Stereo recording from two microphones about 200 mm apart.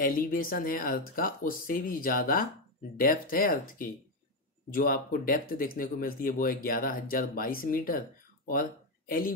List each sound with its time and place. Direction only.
0.0 s speech: 45° left (ahead or behind)